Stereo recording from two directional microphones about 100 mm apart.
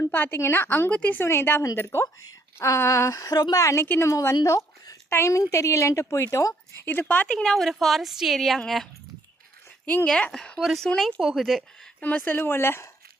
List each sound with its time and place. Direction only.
0.0 s a woman's voice: 20° left (ahead or behind)
6.9 s a woman's voice: 20° left (ahead or behind)
7.3 s a woman's voice: 5° left (ahead or behind)
12.0 s a woman's voice: 15° left (ahead or behind)